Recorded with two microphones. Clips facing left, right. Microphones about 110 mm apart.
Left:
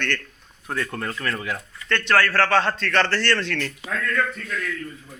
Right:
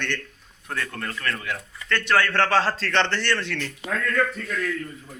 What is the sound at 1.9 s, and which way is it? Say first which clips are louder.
A man's voice: left 1 dB; 10° right (ahead or behind).